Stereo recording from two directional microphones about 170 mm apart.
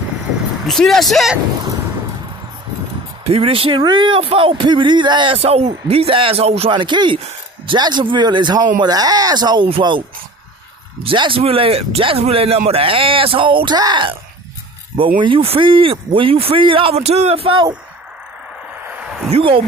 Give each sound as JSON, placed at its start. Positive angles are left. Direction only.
{"t": 0.7, "sound": "speech", "side_deg": 0}
{"t": 3.3, "sound": "speech", "side_deg": -35}
{"t": 15.1, "sound": "speech", "side_deg": -30}
{"t": 18.9, "sound": "a sound", "side_deg": -5}
{"t": 19.3, "sound": "speech", "side_deg": -30}